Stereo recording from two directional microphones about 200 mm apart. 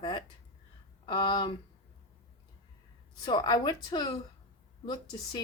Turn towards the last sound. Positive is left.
turn(degrees=20)  # may be behind; listen again after turning